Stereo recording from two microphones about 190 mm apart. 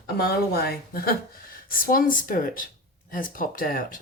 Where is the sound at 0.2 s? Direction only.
55° left (ahead or behind).